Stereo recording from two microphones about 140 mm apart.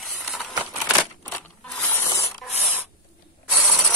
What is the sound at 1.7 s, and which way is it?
Mechanisms, 15° left (ahead or behind).